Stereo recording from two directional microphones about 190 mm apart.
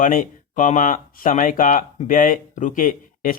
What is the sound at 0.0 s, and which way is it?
Speech, 45° left (ahead or behind).